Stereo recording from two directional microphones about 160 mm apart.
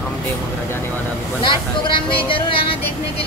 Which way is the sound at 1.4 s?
30° left (ahead or behind).